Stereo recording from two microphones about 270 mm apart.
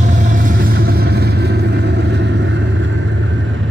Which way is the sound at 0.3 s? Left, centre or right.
Right.